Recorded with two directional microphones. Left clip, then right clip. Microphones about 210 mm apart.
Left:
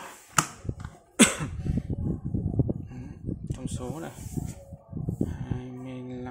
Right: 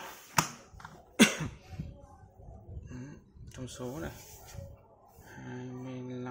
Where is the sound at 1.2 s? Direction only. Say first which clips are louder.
Left 3 dB; 10° left (ahead or behind).